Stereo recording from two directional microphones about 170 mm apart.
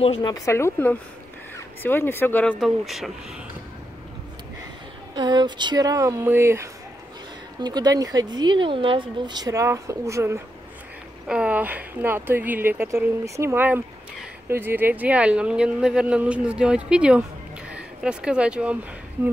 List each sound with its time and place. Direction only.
0.0 s speech: 35° left (ahead or behind)
0.3 s speech: 15° left (ahead or behind)
2.6 s speech: centre (ahead or behind)
5.1 s speech: 25° right (ahead or behind)
11.2 s speech: 5° right (ahead or behind)